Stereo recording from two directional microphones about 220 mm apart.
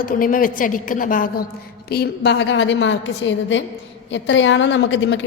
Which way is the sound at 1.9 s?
50° left (ahead or behind).